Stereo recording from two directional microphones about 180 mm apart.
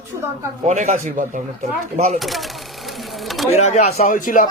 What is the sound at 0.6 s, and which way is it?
Speech, 40° right (ahead or behind).